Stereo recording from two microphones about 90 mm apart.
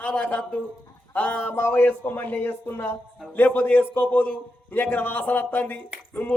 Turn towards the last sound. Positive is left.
turn(degrees=15)  # may be behind; listen again after turning